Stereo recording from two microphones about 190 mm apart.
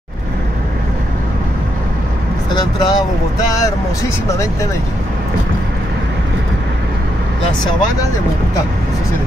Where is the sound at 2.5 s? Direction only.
20° left (ahead or behind).